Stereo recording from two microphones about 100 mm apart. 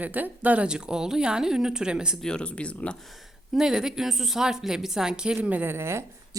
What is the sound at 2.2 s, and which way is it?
Speech, 10° left (ahead or behind).